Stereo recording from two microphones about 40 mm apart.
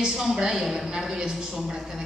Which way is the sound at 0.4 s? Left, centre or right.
Centre.